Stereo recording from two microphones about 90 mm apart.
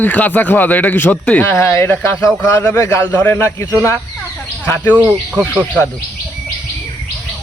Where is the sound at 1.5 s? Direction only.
30° left (ahead or behind).